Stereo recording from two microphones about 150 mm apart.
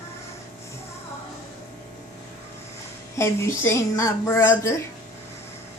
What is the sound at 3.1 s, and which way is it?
Speech, 20° left (ahead or behind).